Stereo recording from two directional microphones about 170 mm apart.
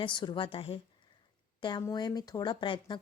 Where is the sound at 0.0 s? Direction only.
30° left (ahead or behind).